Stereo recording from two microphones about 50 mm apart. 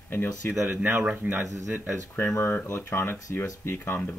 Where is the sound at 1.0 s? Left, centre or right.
Right.